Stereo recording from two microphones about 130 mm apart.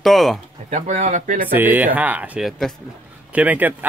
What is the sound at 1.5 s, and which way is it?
Speech, 15° right (ahead or behind).